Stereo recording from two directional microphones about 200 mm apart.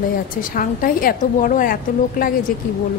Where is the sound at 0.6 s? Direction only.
45° left (ahead or behind).